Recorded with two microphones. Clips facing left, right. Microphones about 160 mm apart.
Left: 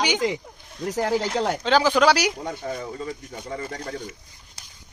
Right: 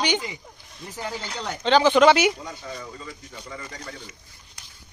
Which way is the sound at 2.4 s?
50° left (ahead or behind).